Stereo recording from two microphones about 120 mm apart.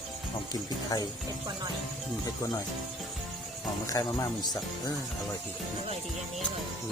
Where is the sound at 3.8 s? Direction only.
30° left (ahead or behind).